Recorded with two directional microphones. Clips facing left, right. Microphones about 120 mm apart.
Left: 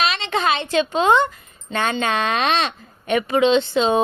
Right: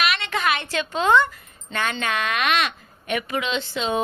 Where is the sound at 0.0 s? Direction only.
25° left (ahead or behind).